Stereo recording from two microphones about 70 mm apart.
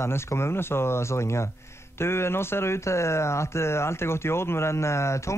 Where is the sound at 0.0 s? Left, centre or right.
Left.